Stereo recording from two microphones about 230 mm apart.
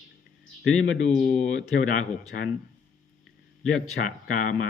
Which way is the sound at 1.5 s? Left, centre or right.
Left.